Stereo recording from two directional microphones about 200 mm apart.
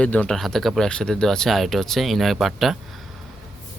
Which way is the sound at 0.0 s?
5° left (ahead or behind).